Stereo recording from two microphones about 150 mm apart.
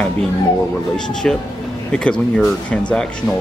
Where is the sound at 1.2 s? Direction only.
5° left (ahead or behind).